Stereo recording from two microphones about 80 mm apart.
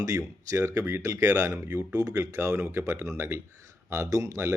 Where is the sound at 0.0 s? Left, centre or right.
Right.